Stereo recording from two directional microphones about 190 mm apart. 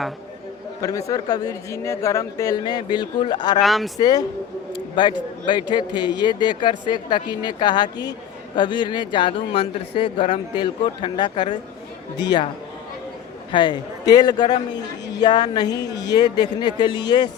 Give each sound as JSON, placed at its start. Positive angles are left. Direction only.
{"t": 0.8, "sound": "a man's voice", "side_deg": 20}
{"t": 3.6, "sound": "speech", "side_deg": 0}
{"t": 3.9, "sound": "a man's voice", "side_deg": 20}
{"t": 13.5, "sound": "a man's voice", "side_deg": 25}